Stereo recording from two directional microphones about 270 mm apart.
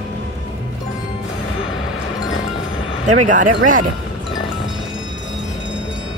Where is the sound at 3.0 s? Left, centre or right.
Right.